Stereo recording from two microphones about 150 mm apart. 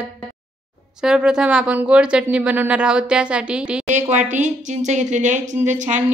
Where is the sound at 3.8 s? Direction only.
50° right (ahead or behind).